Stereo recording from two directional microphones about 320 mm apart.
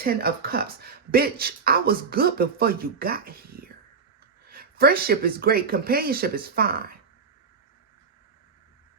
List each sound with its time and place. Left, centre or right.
0.0 s speech: right